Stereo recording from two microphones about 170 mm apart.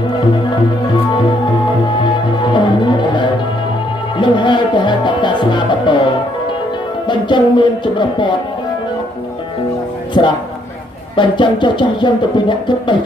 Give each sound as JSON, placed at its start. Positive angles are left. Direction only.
{"t": 2.5, "sound": "music", "side_deg": 25}
{"t": 7.1, "sound": "speech", "side_deg": 25}
{"t": 10.2, "sound": "speech", "side_deg": 30}